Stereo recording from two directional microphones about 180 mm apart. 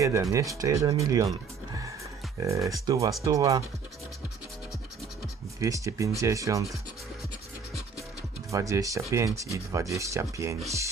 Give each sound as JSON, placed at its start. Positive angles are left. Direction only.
{"t": 0.0, "sound": "speech", "side_deg": -15}
{"t": 2.4, "sound": "speech", "side_deg": -15}
{"t": 5.5, "sound": "speech", "side_deg": -20}
{"t": 8.4, "sound": "speech", "side_deg": -15}